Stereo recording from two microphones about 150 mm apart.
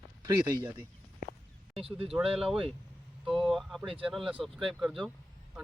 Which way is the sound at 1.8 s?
40° right (ahead or behind).